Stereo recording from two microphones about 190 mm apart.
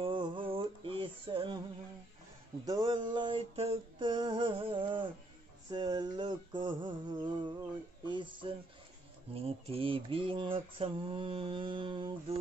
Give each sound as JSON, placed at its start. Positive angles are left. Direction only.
{"t": 0.0, "sound": "music", "side_deg": -25}
{"t": 2.6, "sound": "mantra", "side_deg": -20}